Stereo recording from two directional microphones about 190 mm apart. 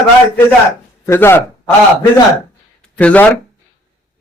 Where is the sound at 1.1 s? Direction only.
10° left (ahead or behind).